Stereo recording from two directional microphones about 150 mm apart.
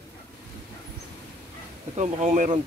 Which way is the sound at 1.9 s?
50° right (ahead or behind).